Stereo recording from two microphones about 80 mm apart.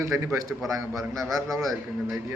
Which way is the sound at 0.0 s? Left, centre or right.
Right.